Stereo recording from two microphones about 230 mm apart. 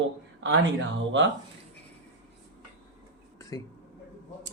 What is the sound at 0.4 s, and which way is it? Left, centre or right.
Speech, right.